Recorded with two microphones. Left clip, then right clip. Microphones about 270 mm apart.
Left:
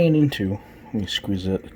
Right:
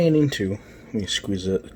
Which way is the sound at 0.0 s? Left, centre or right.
Centre.